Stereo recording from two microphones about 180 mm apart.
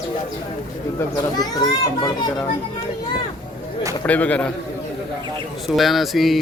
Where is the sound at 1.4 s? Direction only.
25° left (ahead or behind).